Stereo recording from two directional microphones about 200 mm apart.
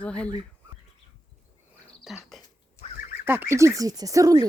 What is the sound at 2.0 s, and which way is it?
Speech, centre (ahead or behind).